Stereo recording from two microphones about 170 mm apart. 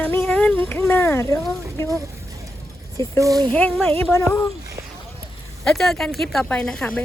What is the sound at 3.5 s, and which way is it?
Speech, 5° left (ahead or behind).